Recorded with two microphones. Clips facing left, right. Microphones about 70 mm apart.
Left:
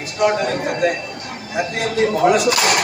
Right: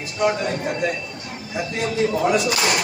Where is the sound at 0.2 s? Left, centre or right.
Left.